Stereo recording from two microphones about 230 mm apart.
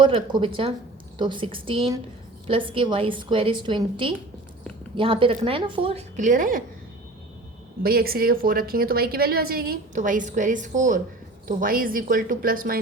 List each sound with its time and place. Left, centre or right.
0.0 s a woman's voice: right
7.8 s a woman's voice: right